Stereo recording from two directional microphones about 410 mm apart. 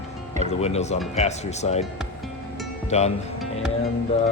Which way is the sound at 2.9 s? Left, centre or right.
Centre.